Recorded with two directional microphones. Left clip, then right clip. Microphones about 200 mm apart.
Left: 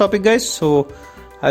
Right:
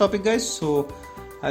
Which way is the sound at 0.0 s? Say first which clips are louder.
Left 6 dB; 40° left (ahead or behind).